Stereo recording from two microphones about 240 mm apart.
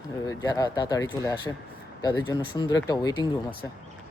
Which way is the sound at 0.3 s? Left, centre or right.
Centre.